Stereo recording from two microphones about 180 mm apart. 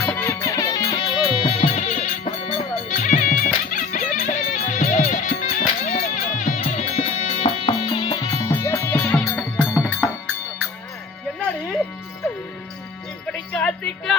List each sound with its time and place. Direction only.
0.1 s music: 10° left (ahead or behind)
0.3 s music: 20° left (ahead or behind)
8.6 s music: 15° left (ahead or behind)
13.5 s music: 5° left (ahead or behind)